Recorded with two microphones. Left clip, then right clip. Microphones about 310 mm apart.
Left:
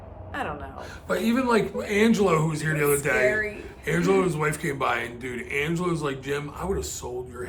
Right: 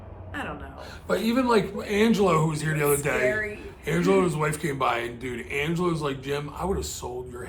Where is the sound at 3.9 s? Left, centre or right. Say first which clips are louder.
Even; centre.